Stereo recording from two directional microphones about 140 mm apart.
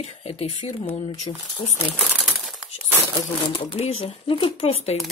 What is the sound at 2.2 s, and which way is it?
Crumpling, 5° right (ahead or behind).